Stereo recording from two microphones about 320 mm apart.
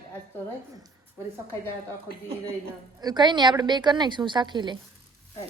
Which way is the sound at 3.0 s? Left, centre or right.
Centre.